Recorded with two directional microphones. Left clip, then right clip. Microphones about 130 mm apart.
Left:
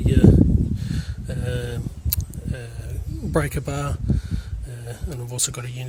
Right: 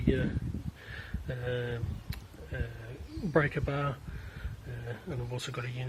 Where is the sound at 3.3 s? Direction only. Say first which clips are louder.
Left 4 dB; 45° left (ahead or behind).